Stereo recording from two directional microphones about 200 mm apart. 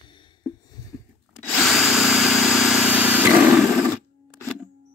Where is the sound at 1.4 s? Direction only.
Centre (ahead or behind).